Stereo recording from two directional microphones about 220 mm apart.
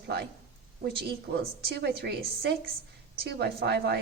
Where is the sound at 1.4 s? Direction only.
45° right (ahead or behind).